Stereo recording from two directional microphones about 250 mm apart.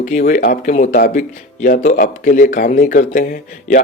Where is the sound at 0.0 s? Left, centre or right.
Left.